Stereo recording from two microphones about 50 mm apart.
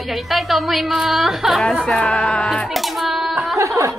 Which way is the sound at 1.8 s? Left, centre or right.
Centre.